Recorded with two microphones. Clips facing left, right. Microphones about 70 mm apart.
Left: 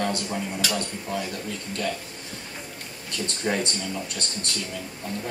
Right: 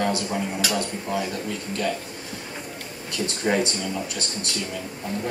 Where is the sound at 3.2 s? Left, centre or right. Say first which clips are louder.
Right 4 dB; centre.